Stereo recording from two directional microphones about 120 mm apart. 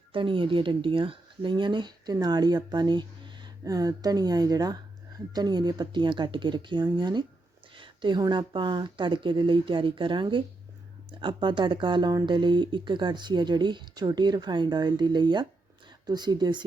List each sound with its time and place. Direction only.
0.1 s speech: 45° right (ahead or behind)
7.8 s a sound: 40° right (ahead or behind)
8.2 s speech: 40° right (ahead or behind)